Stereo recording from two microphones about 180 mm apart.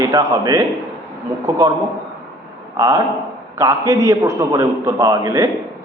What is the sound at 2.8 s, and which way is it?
A man's voice, 20° right (ahead or behind).